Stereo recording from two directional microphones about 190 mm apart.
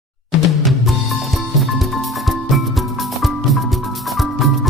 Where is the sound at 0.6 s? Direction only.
Centre (ahead or behind).